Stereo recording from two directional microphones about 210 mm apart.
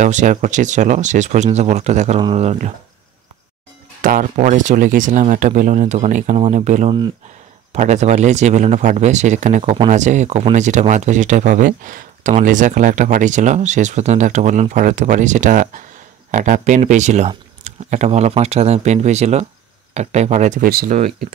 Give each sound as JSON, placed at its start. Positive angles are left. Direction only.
{"t": 0.0, "sound": "speech", "side_deg": -35}
{"t": 4.0, "sound": "speech", "side_deg": -40}